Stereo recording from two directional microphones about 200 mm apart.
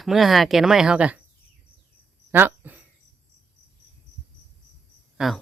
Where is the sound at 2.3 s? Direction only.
10° right (ahead or behind).